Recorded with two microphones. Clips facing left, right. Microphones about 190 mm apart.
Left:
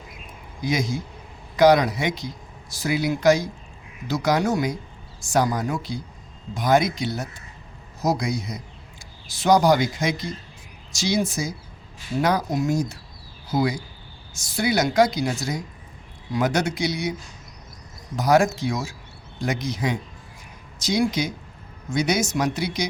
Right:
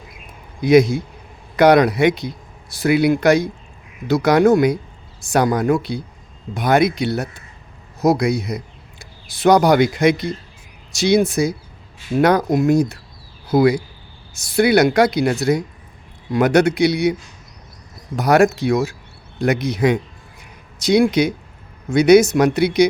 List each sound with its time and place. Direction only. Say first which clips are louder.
0.6 s speech: right 12 dB; 60° right (ahead or behind)
18.2 s speech: right 5 dB; 60° right (ahead or behind)